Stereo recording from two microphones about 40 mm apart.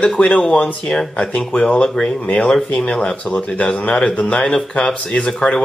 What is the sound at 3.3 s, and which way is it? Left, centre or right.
Speech, left.